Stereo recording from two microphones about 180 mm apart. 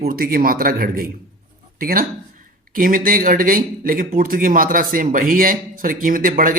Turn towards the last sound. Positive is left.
turn(degrees=-50)  # may be behind; listen again after turning